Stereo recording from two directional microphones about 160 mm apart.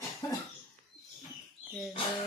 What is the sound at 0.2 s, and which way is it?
Cough, 25° left (ahead or behind).